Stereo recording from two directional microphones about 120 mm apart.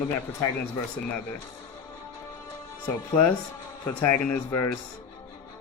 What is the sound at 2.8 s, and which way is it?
Speech, 15° left (ahead or behind).